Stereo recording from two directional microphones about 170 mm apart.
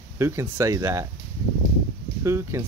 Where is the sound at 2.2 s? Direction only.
15° right (ahead or behind).